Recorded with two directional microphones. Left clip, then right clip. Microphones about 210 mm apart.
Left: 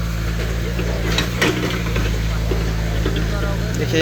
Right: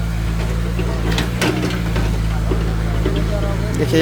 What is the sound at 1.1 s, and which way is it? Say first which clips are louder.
Mechanisms: left 1 dB; 60° right (ahead or behind).